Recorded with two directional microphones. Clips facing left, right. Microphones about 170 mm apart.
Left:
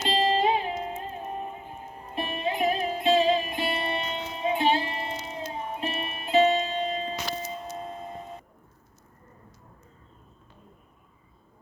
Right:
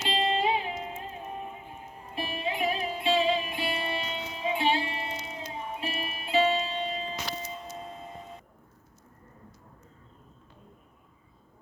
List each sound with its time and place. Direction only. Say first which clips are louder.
0.0 s music: left 4 dB; 40° left (ahead or behind)